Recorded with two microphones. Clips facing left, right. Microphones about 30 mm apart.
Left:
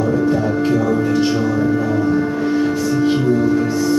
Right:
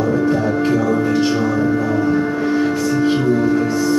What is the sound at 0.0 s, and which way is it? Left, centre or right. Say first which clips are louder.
Music: even; centre.